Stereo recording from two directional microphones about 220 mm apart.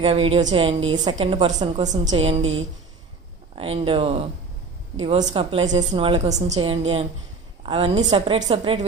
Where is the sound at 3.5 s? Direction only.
25° right (ahead or behind).